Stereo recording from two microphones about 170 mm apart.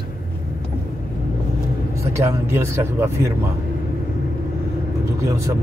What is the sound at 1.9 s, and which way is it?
Speech, 15° right (ahead or behind).